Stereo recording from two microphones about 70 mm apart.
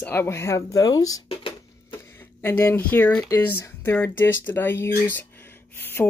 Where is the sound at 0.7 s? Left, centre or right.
Left.